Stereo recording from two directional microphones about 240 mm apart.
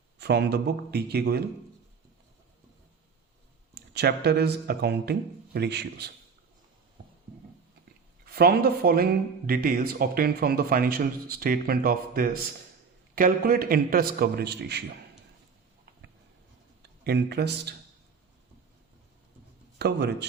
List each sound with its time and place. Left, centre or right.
0.2 s speech: right
3.8 s speech: right
8.2 s a man's voice: right
17.0 s speech: right
19.8 s speech: right